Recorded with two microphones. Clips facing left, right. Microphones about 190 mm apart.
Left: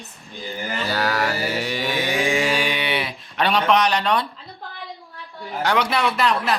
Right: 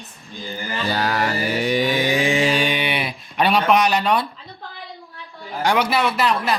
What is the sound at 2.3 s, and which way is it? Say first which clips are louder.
Speech: right 2 dB; 25° right (ahead or behind).